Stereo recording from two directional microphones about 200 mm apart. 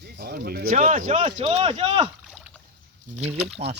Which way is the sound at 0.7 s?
40° right (ahead or behind).